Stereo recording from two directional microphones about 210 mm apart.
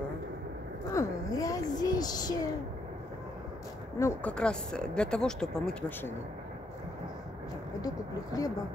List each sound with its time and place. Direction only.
0.9 s a sound: 15° left (ahead or behind)
4.0 s speech: 10° left (ahead or behind)
8.3 s speech: 15° left (ahead or behind)